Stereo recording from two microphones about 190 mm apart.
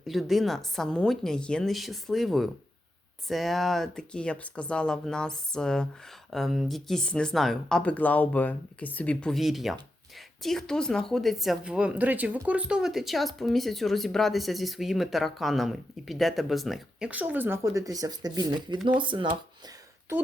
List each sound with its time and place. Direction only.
0.1 s a woman's voice: centre (ahead or behind); by 19.7 s 25° right (ahead or behind)